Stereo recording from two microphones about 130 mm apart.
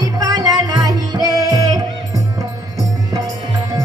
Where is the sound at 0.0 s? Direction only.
30° right (ahead or behind).